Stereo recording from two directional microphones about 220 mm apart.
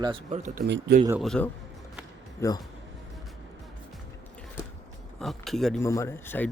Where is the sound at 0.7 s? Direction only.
45° right (ahead or behind).